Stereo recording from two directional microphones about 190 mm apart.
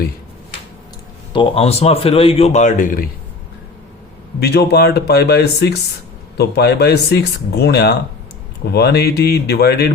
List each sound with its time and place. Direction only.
1.3 s a man's voice: 25° left (ahead or behind); by 3.1 s 45° left (ahead or behind)
4.4 s speech: 60° left (ahead or behind)